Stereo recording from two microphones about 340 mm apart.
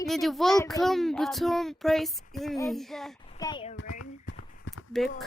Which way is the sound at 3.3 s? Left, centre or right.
Centre.